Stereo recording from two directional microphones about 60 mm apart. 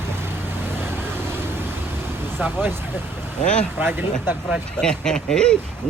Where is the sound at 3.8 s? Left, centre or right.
Right.